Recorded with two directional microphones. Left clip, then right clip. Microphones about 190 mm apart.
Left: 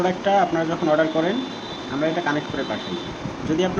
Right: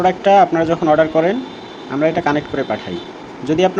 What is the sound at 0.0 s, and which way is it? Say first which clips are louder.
Speech: right 8 dB; 40° right (ahead or behind).